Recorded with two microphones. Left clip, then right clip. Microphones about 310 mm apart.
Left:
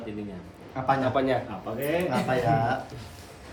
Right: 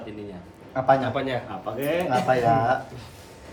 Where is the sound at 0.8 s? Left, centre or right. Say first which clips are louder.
Right 5 dB; centre.